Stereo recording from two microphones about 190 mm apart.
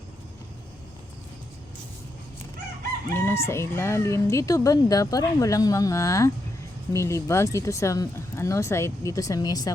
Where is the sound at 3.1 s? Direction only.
15° left (ahead or behind).